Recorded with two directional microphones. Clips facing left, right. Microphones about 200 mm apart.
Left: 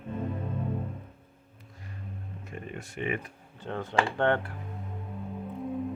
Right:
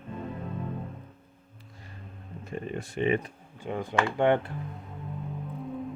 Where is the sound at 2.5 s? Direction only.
30° right (ahead or behind).